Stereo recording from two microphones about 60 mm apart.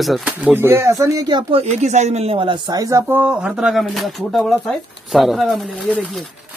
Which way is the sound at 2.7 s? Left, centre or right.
Right.